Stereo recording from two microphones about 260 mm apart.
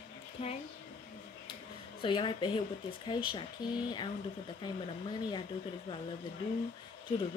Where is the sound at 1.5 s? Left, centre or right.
Centre.